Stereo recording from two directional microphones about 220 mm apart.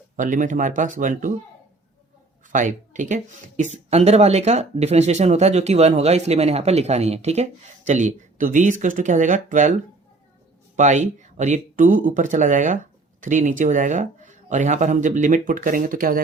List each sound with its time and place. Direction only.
0.2 s speech: 35° right (ahead or behind)
2.5 s speech: 35° right (ahead or behind)